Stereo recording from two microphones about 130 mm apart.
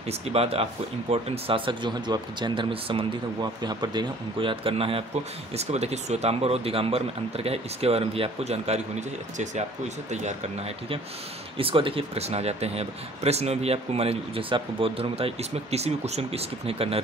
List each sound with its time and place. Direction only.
0.3 s speech: 50° right (ahead or behind)
10.1 s speech: 60° right (ahead or behind)
11.5 s speech: 45° right (ahead or behind)